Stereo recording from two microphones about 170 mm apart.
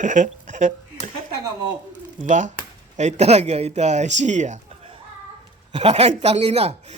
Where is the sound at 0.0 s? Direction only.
50° right (ahead or behind).